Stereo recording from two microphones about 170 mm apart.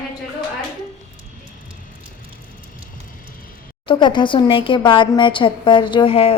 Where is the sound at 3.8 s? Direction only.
30° left (ahead or behind).